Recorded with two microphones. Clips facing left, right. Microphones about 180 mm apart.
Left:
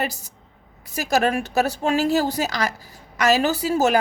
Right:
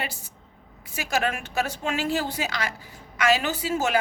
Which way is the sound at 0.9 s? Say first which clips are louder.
Left 6 dB; 40° left (ahead or behind).